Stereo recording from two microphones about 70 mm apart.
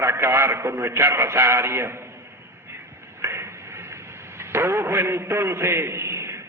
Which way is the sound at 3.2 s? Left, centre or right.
Right.